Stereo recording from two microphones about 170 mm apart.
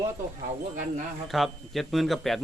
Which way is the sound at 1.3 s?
Centre (ahead or behind).